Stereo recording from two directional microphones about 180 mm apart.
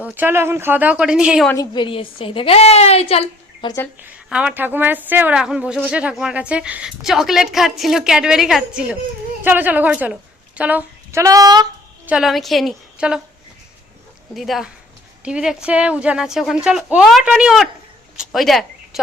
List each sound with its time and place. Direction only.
0.0 s speech: 10° right (ahead or behind)
1.5 s a woman's voice: 25° left (ahead or behind)
4.0 s a woman's voice: 5° right (ahead or behind)
12.0 s a woman's voice: 5° right (ahead or behind)
14.3 s a woman's voice: centre (ahead or behind)